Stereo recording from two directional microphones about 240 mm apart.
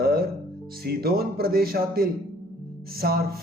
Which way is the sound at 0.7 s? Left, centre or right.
Right.